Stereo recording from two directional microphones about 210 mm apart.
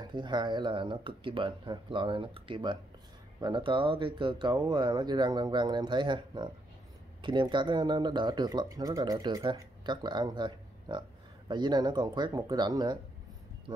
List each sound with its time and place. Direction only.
0.0 s speech: 20° right (ahead or behind)